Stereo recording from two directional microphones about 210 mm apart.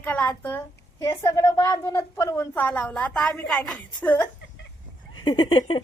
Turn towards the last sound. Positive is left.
turn(degrees=20)  # may be behind; listen again after turning